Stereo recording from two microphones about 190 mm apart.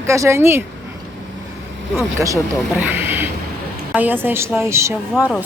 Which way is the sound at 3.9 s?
10° right (ahead or behind).